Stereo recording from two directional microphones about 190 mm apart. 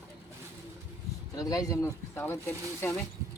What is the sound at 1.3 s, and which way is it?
Speech, 20° left (ahead or behind).